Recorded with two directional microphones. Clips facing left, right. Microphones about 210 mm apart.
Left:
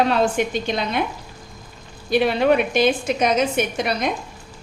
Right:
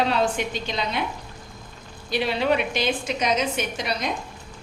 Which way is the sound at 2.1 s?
50° left (ahead or behind).